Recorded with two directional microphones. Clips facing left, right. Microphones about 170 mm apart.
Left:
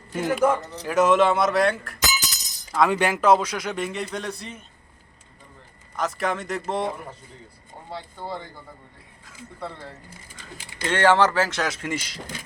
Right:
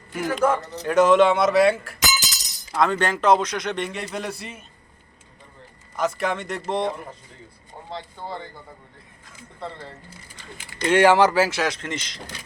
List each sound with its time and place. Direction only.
0.1 s speech: 25° left (ahead or behind)
0.9 s a man's voice: centre (ahead or behind)
2.1 s breaking: 90° right
2.9 s a man's voice: 10° left (ahead or behind); by 4.6 s 5° right (ahead or behind)
6.0 s a man's voice: centre (ahead or behind)
10.8 s speech: 10° right (ahead or behind)
11.8 s speech: 10° left (ahead or behind)